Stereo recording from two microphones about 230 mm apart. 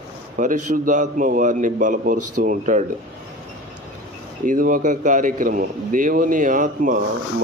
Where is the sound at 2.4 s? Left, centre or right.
Right.